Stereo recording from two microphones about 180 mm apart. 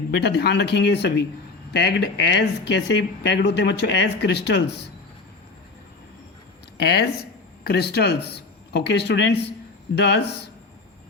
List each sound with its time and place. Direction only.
0.2 s speech: 65° left (ahead or behind)
6.7 s speech: 65° left (ahead or behind)